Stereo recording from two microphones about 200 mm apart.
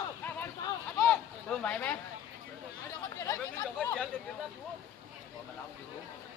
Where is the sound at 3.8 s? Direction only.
5° left (ahead or behind).